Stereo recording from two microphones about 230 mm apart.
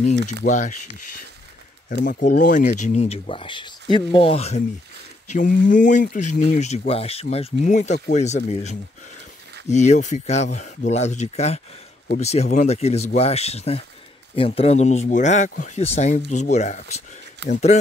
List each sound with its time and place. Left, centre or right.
0.4 s speech: left
2.0 s speech: left